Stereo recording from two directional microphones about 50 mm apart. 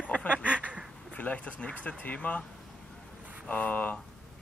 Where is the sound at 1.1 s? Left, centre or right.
Left.